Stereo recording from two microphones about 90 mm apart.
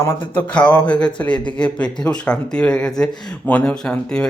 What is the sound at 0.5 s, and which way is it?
Speech, 15° left (ahead or behind).